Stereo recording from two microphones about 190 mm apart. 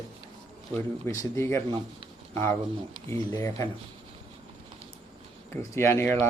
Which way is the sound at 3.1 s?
15° left (ahead or behind).